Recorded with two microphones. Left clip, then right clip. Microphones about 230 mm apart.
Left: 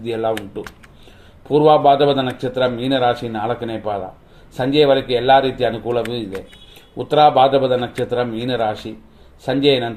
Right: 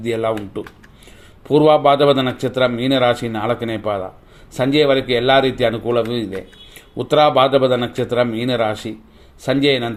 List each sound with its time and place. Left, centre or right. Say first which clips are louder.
0.0 s a man's voice: right 1 dB; right
1.5 s a man's voice: even; right